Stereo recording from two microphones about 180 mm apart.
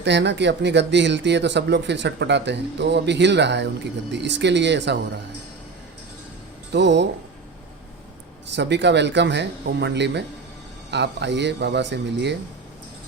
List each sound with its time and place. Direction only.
0.0 s speech: 75° right (ahead or behind)
6.7 s speech: 75° right (ahead or behind)
8.5 s speech: 75° right (ahead or behind)